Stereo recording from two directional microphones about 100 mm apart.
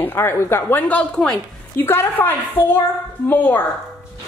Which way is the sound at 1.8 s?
20° left (ahead or behind).